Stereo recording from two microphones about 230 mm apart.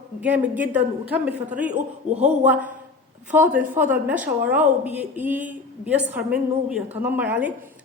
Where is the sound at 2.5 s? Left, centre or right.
Centre.